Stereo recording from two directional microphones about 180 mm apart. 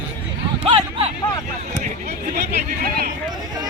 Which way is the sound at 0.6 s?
30° right (ahead or behind).